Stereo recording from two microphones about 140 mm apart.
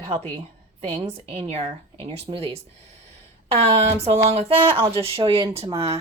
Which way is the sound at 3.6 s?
50° right (ahead or behind).